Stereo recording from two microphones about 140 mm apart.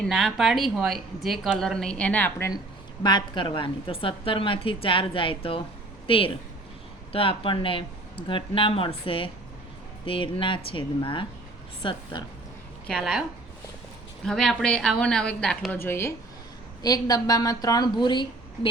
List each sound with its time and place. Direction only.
0.0 s speech: centre (ahead or behind)
3.0 s a woman's voice: 30° left (ahead or behind)
12.9 s speech: centre (ahead or behind)
14.3 s speech: 5° left (ahead or behind)
15.8 s a woman's voice: 20° left (ahead or behind); by 18.7 s 35° left (ahead or behind)